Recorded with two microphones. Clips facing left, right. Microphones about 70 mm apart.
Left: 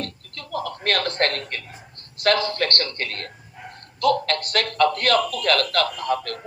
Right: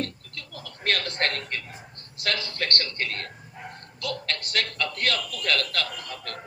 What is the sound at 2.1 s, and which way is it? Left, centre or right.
A man's voice, left.